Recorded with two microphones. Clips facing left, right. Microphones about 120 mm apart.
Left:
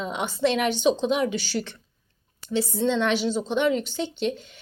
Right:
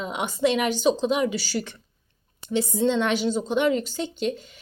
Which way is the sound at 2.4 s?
15° right (ahead or behind).